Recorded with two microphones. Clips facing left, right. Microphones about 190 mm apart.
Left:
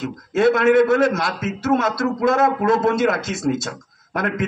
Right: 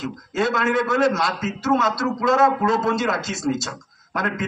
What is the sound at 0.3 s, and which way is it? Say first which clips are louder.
A man's voice: left 7 dB; 55° left (ahead or behind).